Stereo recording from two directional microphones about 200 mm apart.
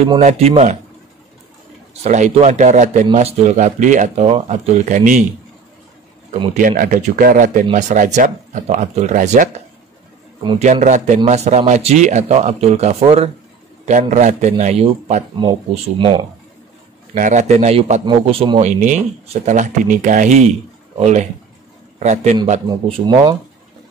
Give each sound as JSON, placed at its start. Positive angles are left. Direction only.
{"t": 0.0, "sound": "speech", "side_deg": -30}
{"t": 2.0, "sound": "speech", "side_deg": -35}
{"t": 6.5, "sound": "a man's voice", "side_deg": -45}
{"t": 10.6, "sound": "speech", "side_deg": -35}
{"t": 17.1, "sound": "speech", "side_deg": -35}
{"t": 22.7, "sound": "speech", "side_deg": -25}